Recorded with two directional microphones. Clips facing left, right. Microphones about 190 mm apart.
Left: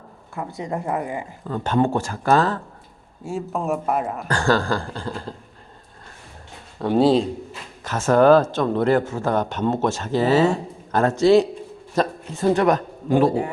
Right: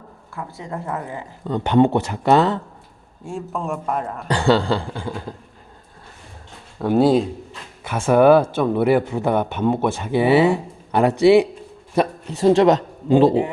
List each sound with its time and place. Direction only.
0.3 s speech: 20° left (ahead or behind)
1.5 s speech: 20° right (ahead or behind)
3.2 s a man's voice: 5° left (ahead or behind)
4.3 s speech: 20° right (ahead or behind)
4.9 s a sound: 5° right (ahead or behind)
6.7 s speech: 5° right (ahead or behind)
12.5 s speech: 20° right (ahead or behind)